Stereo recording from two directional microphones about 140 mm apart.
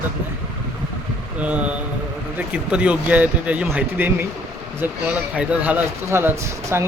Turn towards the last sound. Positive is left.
turn(degrees=-20)  # may be behind; listen again after turning